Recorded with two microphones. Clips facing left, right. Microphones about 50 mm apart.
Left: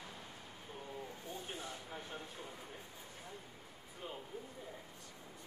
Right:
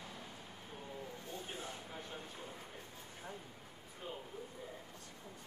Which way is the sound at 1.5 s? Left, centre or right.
Right.